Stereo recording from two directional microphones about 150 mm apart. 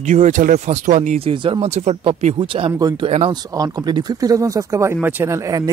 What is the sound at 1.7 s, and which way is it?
Speech, 45° right (ahead or behind).